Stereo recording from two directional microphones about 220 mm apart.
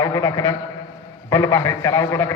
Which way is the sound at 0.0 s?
15° left (ahead or behind).